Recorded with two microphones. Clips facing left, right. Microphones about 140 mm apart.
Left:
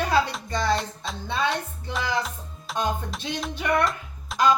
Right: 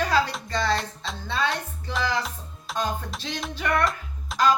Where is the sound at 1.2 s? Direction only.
15° left (ahead or behind).